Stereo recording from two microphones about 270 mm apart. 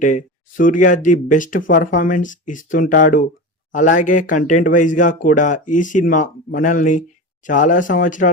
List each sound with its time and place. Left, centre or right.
0.0 s speech: left